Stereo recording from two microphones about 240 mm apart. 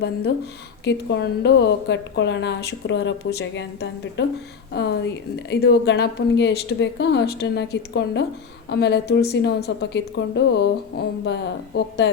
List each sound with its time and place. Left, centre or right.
0.9 s speech: left